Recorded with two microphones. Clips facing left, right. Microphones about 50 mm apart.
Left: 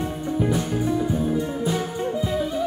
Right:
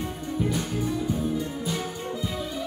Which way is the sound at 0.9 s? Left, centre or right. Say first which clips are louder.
Left 4 dB; centre.